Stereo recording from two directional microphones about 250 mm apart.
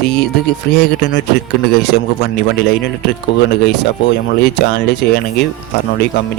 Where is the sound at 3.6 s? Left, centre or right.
Left.